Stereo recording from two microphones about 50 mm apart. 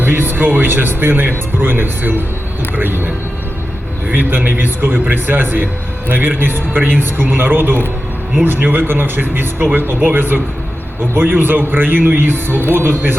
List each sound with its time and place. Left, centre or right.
0.0 s speech: right
4.1 s speech: right